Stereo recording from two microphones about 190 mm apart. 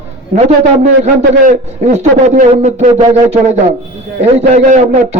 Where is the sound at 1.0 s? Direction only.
40° right (ahead or behind).